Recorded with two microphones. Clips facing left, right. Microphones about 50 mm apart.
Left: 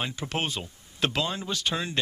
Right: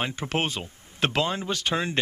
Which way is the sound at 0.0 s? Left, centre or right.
Right.